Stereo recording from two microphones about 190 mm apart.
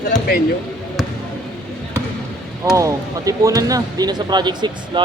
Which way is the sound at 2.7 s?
15° right (ahead or behind).